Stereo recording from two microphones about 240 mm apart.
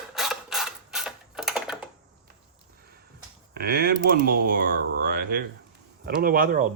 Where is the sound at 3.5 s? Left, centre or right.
Right.